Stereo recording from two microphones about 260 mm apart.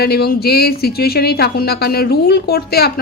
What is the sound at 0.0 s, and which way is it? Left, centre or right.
Speech, left.